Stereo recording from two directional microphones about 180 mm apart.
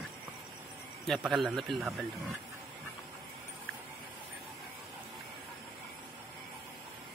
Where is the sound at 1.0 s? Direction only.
Centre (ahead or behind).